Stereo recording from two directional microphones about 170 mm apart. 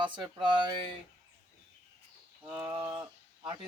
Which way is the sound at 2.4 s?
15° right (ahead or behind).